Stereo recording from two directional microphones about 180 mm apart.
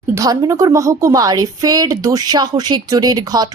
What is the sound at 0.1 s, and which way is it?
A woman's voice, 20° right (ahead or behind).